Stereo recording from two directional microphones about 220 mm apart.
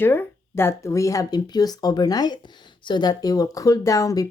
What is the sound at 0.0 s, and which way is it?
Speech, 10° left (ahead or behind).